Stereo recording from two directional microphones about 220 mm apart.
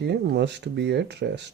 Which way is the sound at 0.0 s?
50° right (ahead or behind).